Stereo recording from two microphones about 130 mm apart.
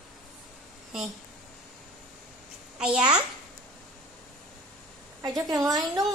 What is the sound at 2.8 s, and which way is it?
Speech, 10° right (ahead or behind).